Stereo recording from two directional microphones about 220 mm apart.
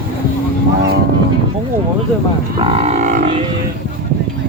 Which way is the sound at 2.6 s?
25° right (ahead or behind).